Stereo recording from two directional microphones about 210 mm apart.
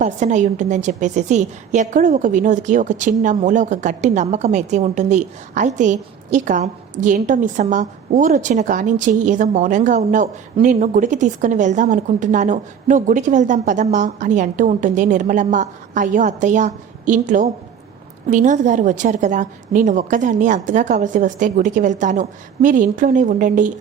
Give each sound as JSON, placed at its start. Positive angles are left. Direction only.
{"t": 0.0, "sound": "a woman's voice", "side_deg": -35}